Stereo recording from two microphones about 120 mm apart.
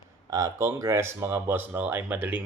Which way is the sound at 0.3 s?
30° right (ahead or behind).